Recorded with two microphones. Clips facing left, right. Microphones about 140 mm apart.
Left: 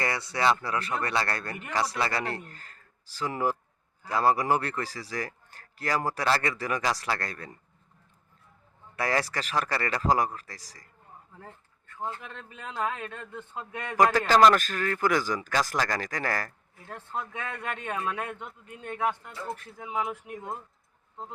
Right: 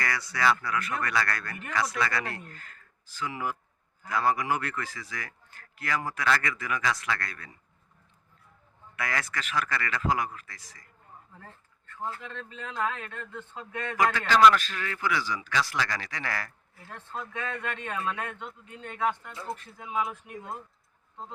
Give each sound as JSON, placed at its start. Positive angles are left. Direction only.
{"t": 0.0, "sound": "a man's voice", "side_deg": 25}
{"t": 9.0, "sound": "a man's voice", "side_deg": 35}
{"t": 11.3, "sound": "speech", "side_deg": 15}
{"t": 13.9, "sound": "a man's voice", "side_deg": 40}
{"t": 16.8, "sound": "speech", "side_deg": 15}